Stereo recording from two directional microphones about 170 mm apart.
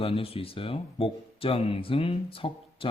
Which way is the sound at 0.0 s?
30° left (ahead or behind).